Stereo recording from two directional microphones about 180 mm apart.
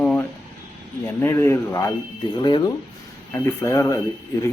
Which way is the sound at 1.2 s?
15° left (ahead or behind).